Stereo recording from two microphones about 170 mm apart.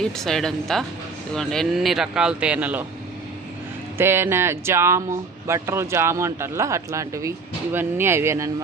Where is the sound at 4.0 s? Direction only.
15° right (ahead or behind).